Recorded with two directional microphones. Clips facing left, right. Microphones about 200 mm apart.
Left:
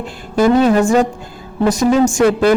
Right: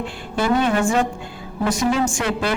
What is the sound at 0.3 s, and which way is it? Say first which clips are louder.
A man's voice: left 8 dB; 40° left (ahead or behind).